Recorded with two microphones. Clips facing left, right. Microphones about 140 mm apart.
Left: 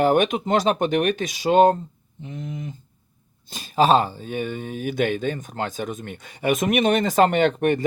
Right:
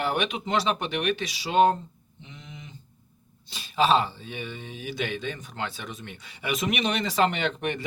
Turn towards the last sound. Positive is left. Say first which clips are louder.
# left 10 dB
turn(degrees=45)  # may be behind; listen again after turning